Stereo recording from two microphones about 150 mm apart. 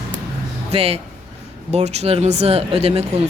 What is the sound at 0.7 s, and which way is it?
A woman's voice, 40° right (ahead or behind).